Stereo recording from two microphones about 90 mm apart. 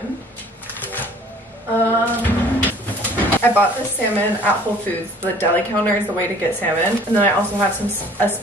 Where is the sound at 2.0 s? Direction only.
20° left (ahead or behind).